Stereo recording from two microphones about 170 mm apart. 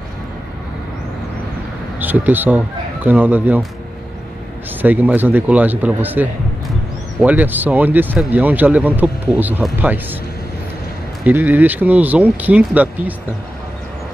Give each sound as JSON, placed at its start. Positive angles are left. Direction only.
{"t": 2.0, "sound": "speech", "side_deg": -10}
{"t": 4.8, "sound": "speech", "side_deg": -10}
{"t": 11.2, "sound": "speech", "side_deg": -10}